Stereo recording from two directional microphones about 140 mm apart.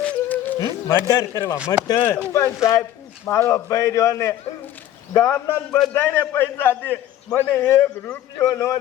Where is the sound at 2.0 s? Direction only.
10° left (ahead or behind).